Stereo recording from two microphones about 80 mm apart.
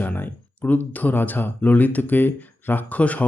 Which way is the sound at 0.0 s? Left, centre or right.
Left.